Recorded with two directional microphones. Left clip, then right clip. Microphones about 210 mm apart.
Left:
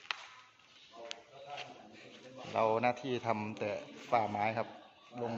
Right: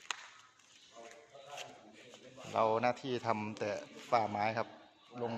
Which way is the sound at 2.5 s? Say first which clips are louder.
Even; 10° right (ahead or behind).